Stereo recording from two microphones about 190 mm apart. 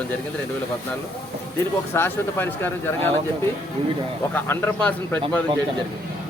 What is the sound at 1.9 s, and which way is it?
Speech, 10° left (ahead or behind).